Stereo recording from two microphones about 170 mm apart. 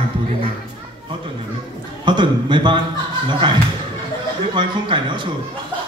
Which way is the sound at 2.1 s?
30° right (ahead or behind).